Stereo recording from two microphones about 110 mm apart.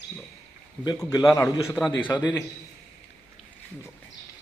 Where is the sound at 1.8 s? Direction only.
5° right (ahead or behind).